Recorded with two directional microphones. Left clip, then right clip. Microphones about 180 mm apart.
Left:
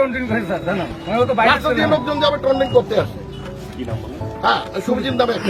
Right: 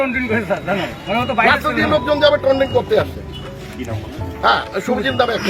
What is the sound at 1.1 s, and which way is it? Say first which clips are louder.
Speech: even; 60° left (ahead or behind).